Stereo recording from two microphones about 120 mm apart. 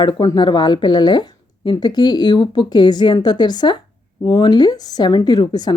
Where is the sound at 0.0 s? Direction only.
35° left (ahead or behind).